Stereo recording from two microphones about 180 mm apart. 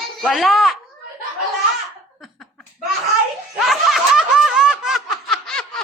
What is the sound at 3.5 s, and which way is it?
Snicker, centre (ahead or behind).